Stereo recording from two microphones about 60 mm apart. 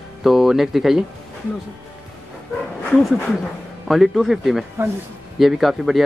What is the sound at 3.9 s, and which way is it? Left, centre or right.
Speech, centre.